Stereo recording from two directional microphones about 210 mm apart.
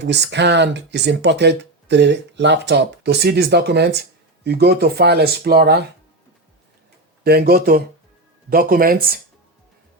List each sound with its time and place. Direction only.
0.0 s speech: 55° right (ahead or behind)
7.3 s speech: 45° right (ahead or behind)